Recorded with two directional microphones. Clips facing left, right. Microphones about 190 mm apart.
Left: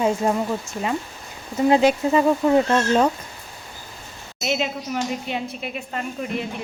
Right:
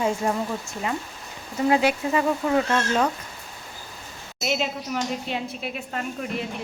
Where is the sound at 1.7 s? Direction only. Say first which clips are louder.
Left 4 dB; 25° left (ahead or behind).